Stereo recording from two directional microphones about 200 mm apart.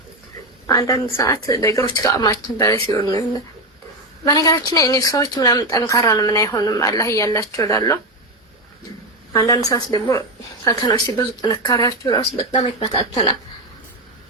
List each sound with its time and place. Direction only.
0.7 s a woman's voice: 15° left (ahead or behind)
4.3 s a woman's voice: 20° left (ahead or behind)
9.3 s a woman's voice: 15° left (ahead or behind)